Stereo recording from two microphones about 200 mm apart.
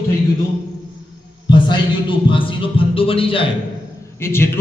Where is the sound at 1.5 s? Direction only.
25° left (ahead or behind).